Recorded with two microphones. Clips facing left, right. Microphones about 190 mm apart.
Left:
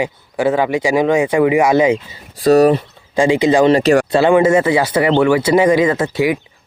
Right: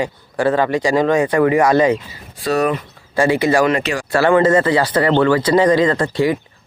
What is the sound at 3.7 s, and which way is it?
Speech, 35° left (ahead or behind).